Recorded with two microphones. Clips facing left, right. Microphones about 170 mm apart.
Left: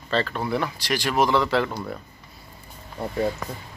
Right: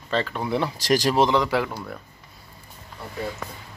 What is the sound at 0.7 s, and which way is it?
Speech, 40° right (ahead or behind).